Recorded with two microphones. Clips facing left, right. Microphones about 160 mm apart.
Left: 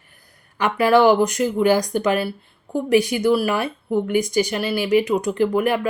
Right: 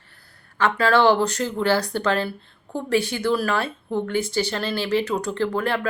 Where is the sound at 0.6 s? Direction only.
15° left (ahead or behind).